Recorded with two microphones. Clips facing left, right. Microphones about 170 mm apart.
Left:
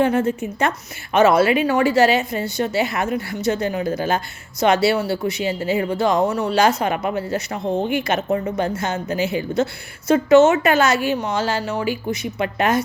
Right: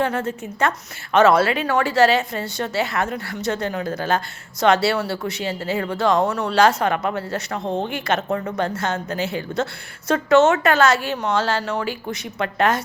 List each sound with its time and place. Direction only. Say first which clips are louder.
0.0 s speech: left 5 dB; 15° left (ahead or behind)